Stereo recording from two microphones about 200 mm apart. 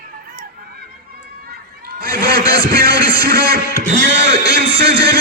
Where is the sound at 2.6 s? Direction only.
50° right (ahead or behind).